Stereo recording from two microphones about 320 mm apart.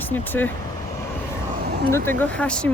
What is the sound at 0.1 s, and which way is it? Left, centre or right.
Speech, centre.